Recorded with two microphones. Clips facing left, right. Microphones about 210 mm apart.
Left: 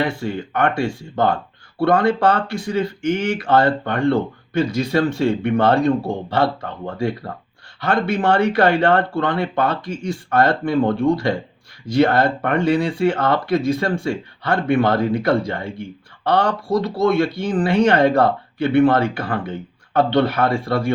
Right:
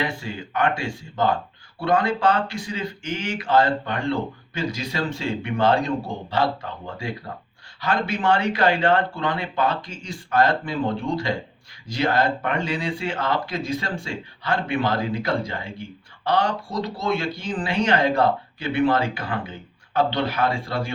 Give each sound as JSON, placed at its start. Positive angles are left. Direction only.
{"t": 0.0, "sound": "speech", "side_deg": 55}